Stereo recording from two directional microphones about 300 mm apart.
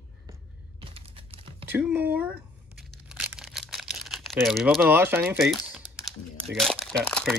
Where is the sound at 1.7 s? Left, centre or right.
Centre.